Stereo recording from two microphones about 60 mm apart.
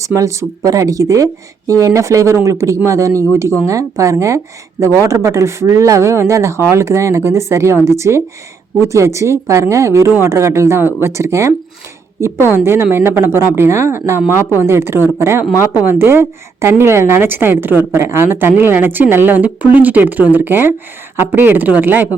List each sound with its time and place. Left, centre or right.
0.0 s speech: right
0.6 s speech: right
12.5 s a woman's voice: right